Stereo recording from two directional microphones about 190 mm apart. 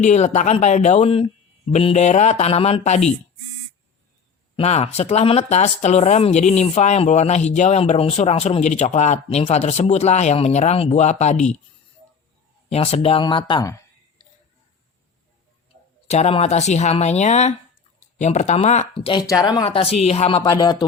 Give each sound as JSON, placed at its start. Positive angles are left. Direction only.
{"t": 0.0, "sound": "speech", "side_deg": 40}
{"t": 4.5, "sound": "speech", "side_deg": 35}
{"t": 12.7, "sound": "speech", "side_deg": 30}
{"t": 16.0, "sound": "speech", "side_deg": 35}
{"t": 20.4, "sound": "speech", "side_deg": 20}